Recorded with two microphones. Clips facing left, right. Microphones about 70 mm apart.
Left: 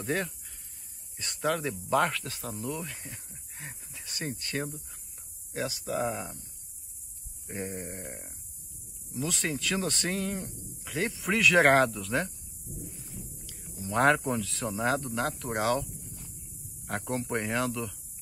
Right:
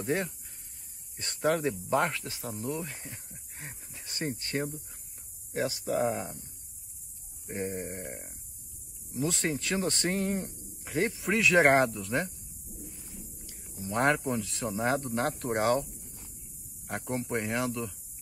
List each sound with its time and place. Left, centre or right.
0.0 s speech: right
3.5 s a sound: right
5.5 s speech: right
7.5 s speech: right
9.1 s speech: right
11.5 s speech: centre
12.8 s a sound: centre
13.7 s speech: centre
14.8 s speech: right
16.8 s speech: centre